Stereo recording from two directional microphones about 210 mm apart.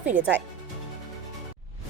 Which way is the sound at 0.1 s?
5° right (ahead or behind).